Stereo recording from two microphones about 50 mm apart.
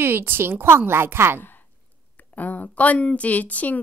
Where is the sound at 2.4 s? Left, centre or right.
Left.